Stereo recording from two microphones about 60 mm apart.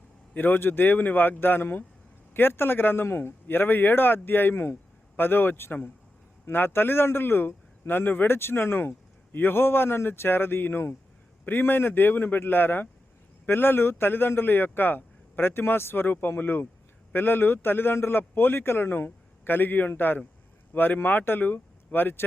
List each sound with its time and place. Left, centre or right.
0.3 s speech: left